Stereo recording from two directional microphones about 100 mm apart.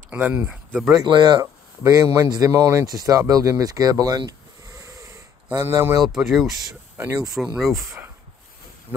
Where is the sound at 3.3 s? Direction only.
35° right (ahead or behind).